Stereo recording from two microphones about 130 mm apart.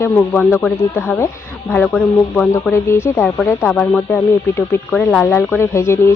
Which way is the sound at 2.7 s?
20° left (ahead or behind).